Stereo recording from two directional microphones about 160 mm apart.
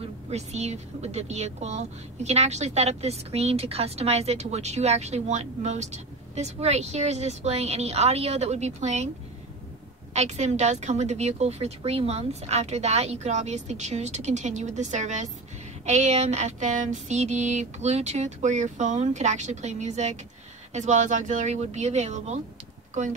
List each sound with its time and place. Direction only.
0.3 s a woman's voice: 45° right (ahead or behind)
10.1 s a woman's voice: 45° right (ahead or behind)